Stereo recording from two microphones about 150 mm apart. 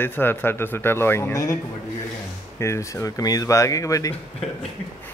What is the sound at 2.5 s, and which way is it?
Speech, 20° left (ahead or behind).